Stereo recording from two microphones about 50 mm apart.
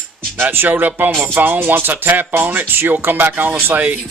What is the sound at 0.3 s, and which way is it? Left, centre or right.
Speech, right.